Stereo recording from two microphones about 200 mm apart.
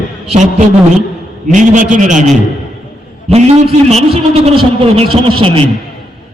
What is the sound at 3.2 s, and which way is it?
A man's voice, 30° right (ahead or behind).